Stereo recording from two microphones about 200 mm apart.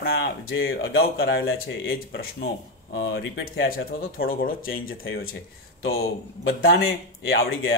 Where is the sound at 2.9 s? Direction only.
55° left (ahead or behind).